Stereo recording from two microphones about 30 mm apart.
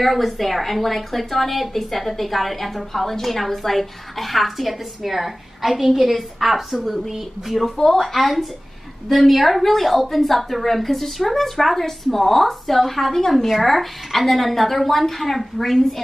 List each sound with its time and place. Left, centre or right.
0.0 s speech: centre
7.7 s speech: centre